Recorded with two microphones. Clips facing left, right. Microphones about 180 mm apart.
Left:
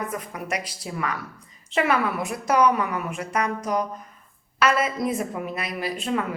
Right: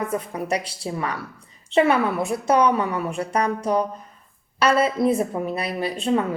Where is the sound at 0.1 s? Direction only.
30° right (ahead or behind).